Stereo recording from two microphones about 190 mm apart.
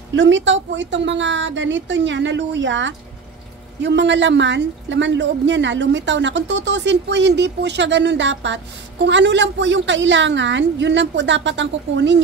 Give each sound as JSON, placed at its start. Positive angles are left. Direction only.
{"t": 0.1, "sound": "speech", "side_deg": -75}